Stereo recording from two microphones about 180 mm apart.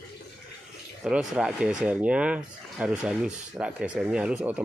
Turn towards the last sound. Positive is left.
turn(degrees=-5)  # may be behind; listen again after turning